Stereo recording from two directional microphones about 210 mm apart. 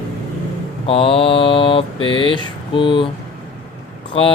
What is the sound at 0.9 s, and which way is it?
Mantra, 25° left (ahead or behind).